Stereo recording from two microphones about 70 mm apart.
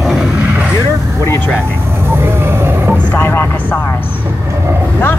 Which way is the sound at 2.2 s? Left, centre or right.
Right.